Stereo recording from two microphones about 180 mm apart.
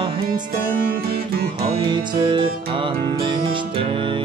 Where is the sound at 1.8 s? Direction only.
25° right (ahead or behind).